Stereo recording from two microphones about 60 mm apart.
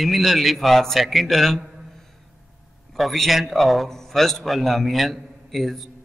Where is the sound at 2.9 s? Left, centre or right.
Centre.